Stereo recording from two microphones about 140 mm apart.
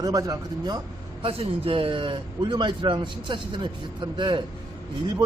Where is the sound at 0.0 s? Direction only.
25° right (ahead or behind).